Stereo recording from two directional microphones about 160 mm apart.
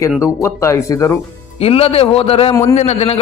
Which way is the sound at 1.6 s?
35° left (ahead or behind).